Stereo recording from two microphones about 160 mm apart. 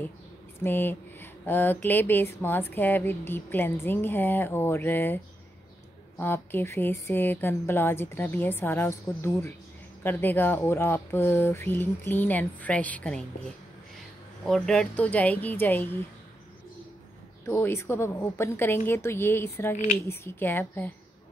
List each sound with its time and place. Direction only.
0.7 s speech: 15° left (ahead or behind)
14.4 s speech: 5° left (ahead or behind)
17.5 s speech: 15° left (ahead or behind)